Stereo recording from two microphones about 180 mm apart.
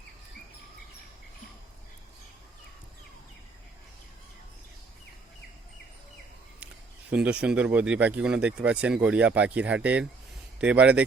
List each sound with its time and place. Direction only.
7.1 s speech: 5° right (ahead or behind)